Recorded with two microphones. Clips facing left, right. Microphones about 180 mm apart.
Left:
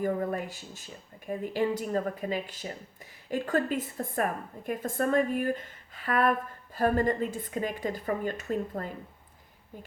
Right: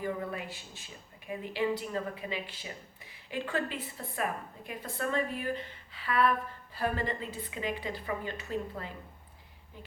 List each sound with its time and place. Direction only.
0.0 s a woman's voice: 45° left (ahead or behind)